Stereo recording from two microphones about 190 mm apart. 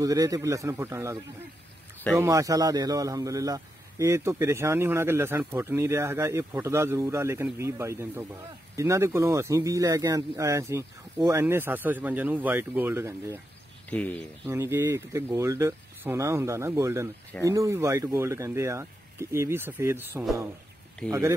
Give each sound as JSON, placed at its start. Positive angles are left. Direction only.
{"t": 0.0, "sound": "a man's voice", "side_deg": -20}
{"t": 13.8, "sound": "speech", "side_deg": 5}
{"t": 14.4, "sound": "a man's voice", "side_deg": -15}